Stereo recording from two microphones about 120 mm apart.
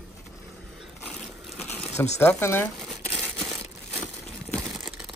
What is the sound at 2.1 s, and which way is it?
Speech, 20° left (ahead or behind).